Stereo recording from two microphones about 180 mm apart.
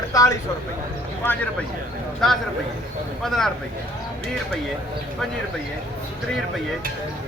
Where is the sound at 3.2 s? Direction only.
Centre (ahead or behind).